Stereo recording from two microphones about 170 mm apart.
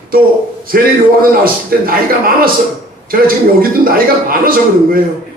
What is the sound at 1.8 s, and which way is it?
A man's voice, 60° right (ahead or behind).